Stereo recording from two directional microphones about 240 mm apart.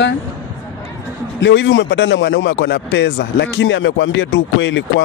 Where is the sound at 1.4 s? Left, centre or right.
Left.